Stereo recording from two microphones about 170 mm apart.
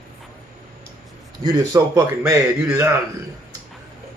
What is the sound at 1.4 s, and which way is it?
A man's voice, 25° right (ahead or behind).